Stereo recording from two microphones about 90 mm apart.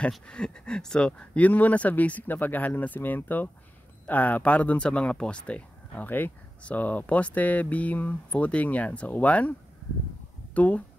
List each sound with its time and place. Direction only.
0.1 s speech: 10° left (ahead or behind)